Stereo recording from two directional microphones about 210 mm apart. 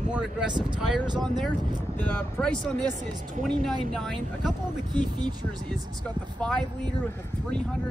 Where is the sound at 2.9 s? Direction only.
35° right (ahead or behind).